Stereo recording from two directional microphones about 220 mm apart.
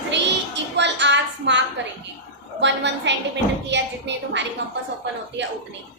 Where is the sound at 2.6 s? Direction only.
55° right (ahead or behind).